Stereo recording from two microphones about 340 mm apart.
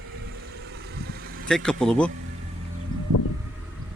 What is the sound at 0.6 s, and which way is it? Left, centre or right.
Vehicle, right.